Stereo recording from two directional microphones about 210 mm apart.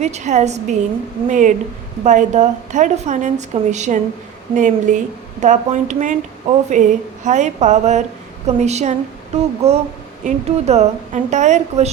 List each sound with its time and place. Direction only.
0.0 s a woman's voice: 35° right (ahead or behind)